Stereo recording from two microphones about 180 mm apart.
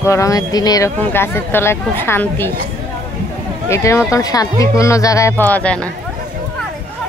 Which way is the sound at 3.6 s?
15° left (ahead or behind).